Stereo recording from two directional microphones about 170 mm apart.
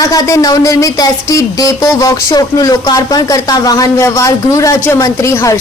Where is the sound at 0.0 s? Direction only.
20° left (ahead or behind).